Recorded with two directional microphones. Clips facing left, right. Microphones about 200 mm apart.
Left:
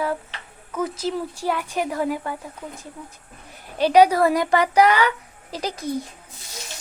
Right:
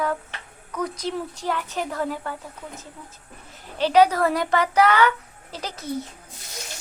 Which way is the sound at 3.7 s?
10° left (ahead or behind).